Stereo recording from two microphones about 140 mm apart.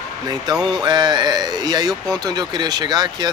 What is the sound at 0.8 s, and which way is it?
Speech, 30° right (ahead or behind).